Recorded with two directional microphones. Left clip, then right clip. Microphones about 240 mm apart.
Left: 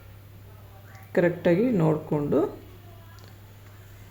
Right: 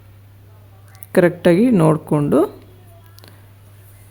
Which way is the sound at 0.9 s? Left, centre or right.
Right.